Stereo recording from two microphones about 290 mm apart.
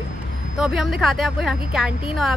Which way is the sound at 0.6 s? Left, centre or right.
Centre.